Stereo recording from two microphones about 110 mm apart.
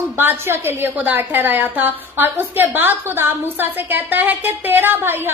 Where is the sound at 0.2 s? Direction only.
20° right (ahead or behind).